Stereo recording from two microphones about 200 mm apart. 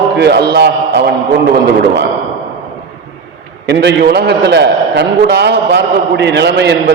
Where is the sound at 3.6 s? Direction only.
60° right (ahead or behind).